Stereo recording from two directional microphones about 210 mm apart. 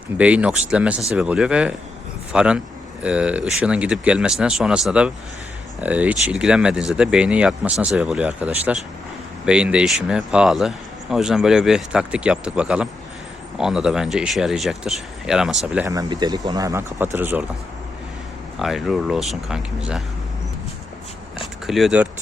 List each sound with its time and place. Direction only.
0.2 s speech: 5° right (ahead or behind)
15.9 s speech: 20° right (ahead or behind)
18.6 s speech: centre (ahead or behind)
21.7 s speech: centre (ahead or behind)